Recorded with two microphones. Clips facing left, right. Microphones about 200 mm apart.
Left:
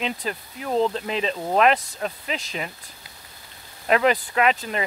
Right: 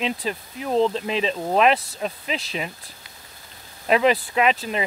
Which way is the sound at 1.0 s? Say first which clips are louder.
Right 2 dB; 25° right (ahead or behind).